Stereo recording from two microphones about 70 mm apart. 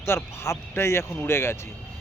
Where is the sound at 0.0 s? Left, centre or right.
Left.